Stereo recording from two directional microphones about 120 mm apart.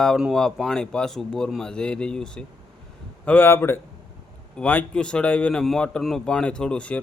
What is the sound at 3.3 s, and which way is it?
A man's voice, 15° left (ahead or behind).